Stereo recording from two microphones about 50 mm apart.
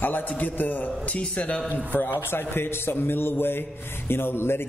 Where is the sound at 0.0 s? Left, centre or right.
Left.